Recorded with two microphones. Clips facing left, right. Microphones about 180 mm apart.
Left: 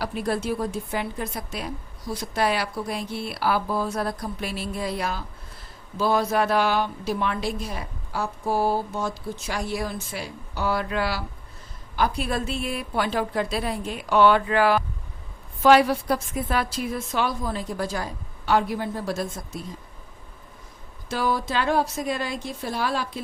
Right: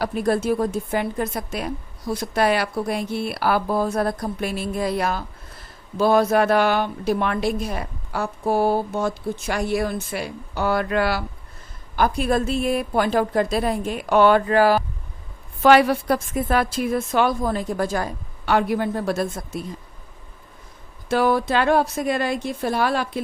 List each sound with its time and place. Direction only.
0.0 s a woman's voice: 45° right (ahead or behind)
15.6 s a woman's voice: 65° right (ahead or behind)
21.1 s a woman's voice: 60° right (ahead or behind)